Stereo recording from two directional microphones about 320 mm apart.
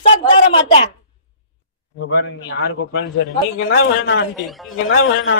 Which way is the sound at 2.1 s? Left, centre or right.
Left.